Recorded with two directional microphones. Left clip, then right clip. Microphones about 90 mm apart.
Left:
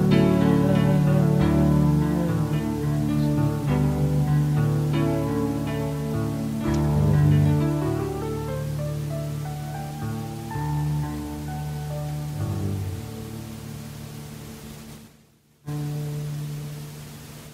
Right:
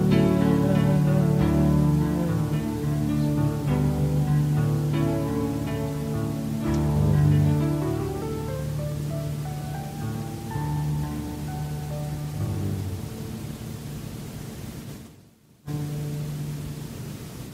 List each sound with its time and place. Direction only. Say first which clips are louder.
0.0 s music: left 2 dB; 35° left (ahead or behind)